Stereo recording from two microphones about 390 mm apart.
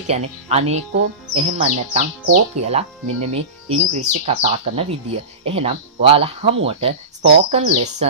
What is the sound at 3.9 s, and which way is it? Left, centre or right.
Speech, centre.